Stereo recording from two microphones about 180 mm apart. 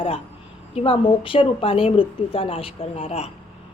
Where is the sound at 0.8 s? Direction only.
30° left (ahead or behind).